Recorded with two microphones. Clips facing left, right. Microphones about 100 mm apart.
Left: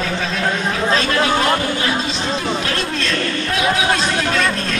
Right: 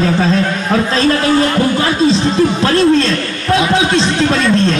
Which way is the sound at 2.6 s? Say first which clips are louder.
Right 12 dB; 35° right (ahead or behind).